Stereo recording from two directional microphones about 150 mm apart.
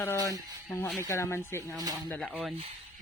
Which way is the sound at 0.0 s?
20° left (ahead or behind).